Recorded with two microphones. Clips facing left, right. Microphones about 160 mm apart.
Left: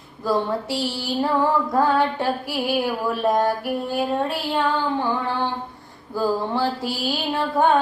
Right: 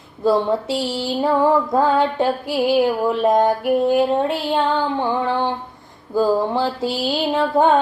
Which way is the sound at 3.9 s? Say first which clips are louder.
Right 6 dB; 20° right (ahead or behind).